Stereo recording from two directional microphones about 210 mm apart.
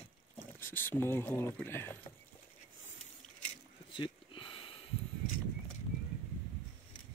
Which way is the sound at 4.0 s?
25° left (ahead or behind).